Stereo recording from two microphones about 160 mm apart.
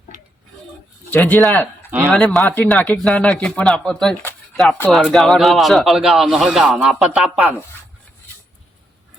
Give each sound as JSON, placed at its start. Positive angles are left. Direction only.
{"t": 0.1, "sound": "tick-tock", "side_deg": -50}
{"t": 1.1, "sound": "speech", "side_deg": 10}